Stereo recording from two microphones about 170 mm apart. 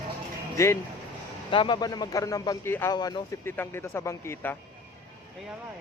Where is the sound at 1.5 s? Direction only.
30° left (ahead or behind).